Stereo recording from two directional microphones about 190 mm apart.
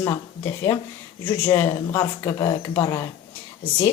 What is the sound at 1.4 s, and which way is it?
Speech, 15° left (ahead or behind).